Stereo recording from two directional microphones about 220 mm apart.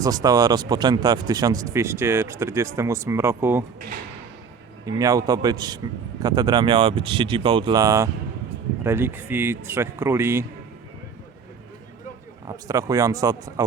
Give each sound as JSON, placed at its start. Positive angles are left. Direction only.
{"t": 0.0, "sound": "speech", "side_deg": -15}
{"t": 4.9, "sound": "speech", "side_deg": -15}
{"t": 12.5, "sound": "speech", "side_deg": -15}